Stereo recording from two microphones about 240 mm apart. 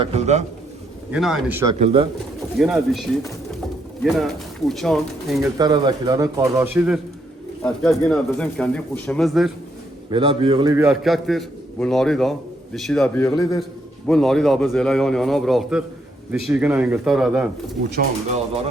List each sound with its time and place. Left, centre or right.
0.0 s a man's voice: right
1.1 s speech: centre
1.8 s a man's voice: right
2.6 s speech: centre
5.5 s a man's voice: centre
10.1 s a man's voice: right
10.8 s speech: centre
13.3 s a man's voice: centre
14.1 s speech: centre